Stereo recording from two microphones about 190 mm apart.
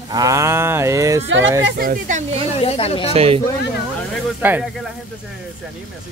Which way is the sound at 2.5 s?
30° left (ahead or behind).